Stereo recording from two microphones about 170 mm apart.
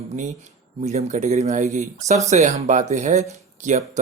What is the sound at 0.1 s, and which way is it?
Speech, 45° right (ahead or behind).